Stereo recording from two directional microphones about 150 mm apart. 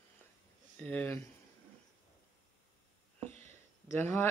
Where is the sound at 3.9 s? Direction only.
15° left (ahead or behind).